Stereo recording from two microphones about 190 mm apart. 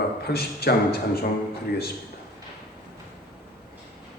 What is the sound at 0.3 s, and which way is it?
Speech, 55° left (ahead or behind).